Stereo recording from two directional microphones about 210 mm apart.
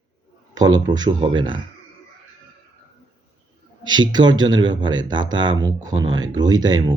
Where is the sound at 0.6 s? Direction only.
20° right (ahead or behind).